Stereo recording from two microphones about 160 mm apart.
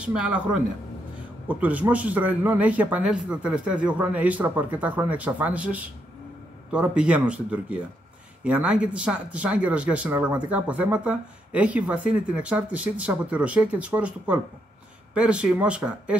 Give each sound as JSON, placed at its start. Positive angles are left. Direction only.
{"t": 0.0, "sound": "a man's voice", "side_deg": -10}
{"t": 1.5, "sound": "a man's voice", "side_deg": -10}